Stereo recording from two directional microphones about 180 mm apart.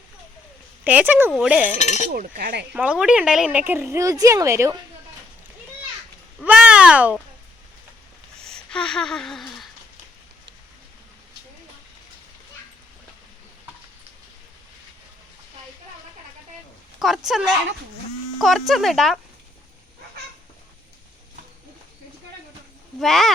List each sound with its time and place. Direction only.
0.9 s a woman's voice: 10° right (ahead or behind)
1.8 s chink: 40° left (ahead or behind)
2.1 s speech: 50° right (ahead or behind)
2.7 s a woman's voice: 5° right (ahead or behind)
6.4 s a sound: 5° right (ahead or behind)
8.4 s a sound: 5° left (ahead or behind)
17.0 s speech: centre (ahead or behind)
23.0 s speech: centre (ahead or behind)